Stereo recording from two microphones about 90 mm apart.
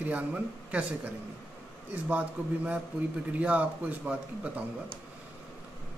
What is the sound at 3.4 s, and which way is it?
A man's voice, 15° right (ahead or behind).